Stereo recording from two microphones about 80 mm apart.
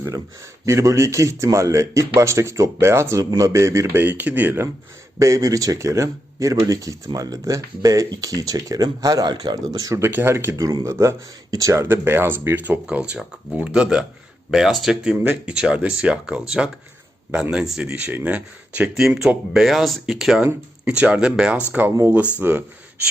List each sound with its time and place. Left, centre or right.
0.6 s speech: right
4.0 s speech: right
5.2 s speech: right
10.1 s speech: right
18.9 s speech: centre
20.8 s speech: centre